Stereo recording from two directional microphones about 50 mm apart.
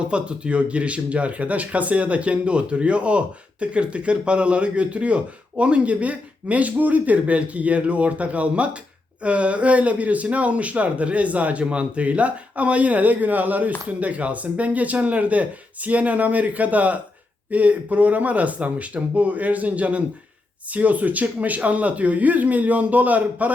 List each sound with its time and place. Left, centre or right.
0.1 s speech: right